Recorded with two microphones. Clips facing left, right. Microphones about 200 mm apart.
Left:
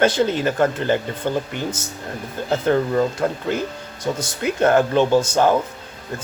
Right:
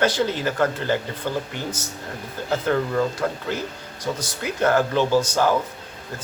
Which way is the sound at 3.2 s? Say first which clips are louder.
Left 4 dB; 25° left (ahead or behind).